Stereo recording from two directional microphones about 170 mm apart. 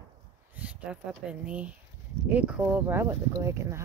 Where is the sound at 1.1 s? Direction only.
5° right (ahead or behind).